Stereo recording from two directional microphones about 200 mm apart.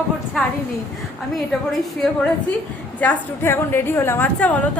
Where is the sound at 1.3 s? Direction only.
Centre (ahead or behind).